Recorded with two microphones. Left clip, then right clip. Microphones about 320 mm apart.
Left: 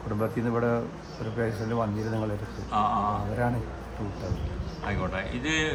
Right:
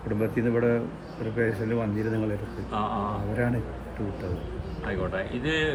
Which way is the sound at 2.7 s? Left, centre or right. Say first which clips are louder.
Left 4 dB; centre.